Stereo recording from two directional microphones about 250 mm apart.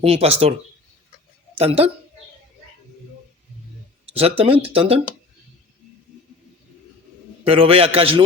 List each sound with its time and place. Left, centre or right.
0.0 s a man's voice: right
1.5 s a man's voice: right
4.1 s a man's voice: right
7.4 s a man's voice: right